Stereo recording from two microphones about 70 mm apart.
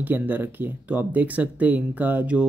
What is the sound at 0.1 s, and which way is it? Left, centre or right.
Speech, right.